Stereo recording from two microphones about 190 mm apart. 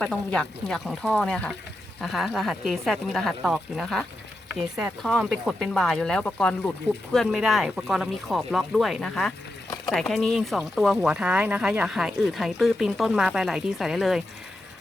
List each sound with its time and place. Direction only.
0.0 s speech: 5° left (ahead or behind)